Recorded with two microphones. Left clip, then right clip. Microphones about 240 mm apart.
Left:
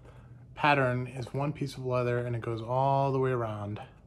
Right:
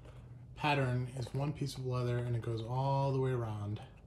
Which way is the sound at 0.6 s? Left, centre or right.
Centre.